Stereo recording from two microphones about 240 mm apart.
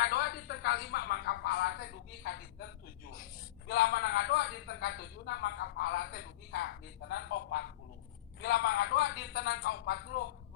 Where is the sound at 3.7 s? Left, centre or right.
Left.